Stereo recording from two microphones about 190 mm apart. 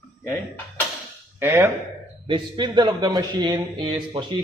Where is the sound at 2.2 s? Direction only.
25° right (ahead or behind).